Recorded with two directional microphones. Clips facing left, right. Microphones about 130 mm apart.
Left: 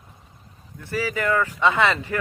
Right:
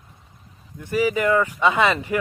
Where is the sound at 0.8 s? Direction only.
15° right (ahead or behind).